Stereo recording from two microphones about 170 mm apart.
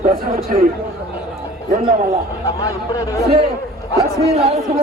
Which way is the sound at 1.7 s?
50° right (ahead or behind).